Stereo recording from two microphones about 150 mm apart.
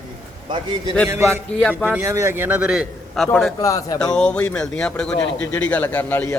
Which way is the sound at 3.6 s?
20° left (ahead or behind).